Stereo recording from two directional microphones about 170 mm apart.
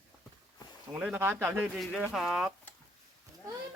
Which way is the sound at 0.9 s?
10° right (ahead or behind).